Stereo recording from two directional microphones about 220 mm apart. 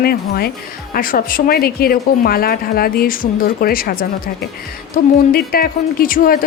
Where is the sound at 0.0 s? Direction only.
45° left (ahead or behind).